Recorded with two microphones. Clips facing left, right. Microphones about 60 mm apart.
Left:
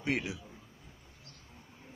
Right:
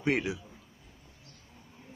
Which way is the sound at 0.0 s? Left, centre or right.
Right.